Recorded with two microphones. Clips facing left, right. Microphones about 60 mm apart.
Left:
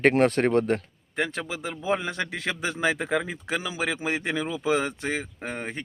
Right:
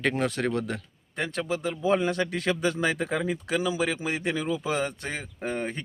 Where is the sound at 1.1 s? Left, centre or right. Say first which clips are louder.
Even; left.